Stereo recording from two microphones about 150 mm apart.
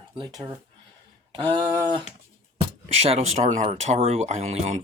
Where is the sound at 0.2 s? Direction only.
30° right (ahead or behind).